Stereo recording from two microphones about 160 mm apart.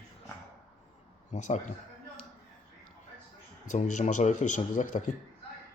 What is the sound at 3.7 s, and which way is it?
A man's voice, 50° left (ahead or behind).